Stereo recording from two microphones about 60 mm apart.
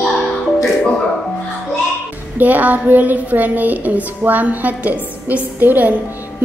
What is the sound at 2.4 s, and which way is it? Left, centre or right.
A woman's voice, right.